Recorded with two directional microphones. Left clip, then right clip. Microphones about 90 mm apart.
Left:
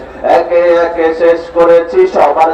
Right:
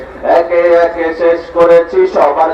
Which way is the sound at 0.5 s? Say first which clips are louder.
Even; 40° left (ahead or behind).